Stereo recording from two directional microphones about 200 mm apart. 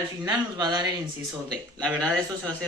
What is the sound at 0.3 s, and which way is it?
Speech, 20° right (ahead or behind).